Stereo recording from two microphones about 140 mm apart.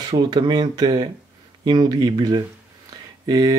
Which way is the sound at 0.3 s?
30° right (ahead or behind).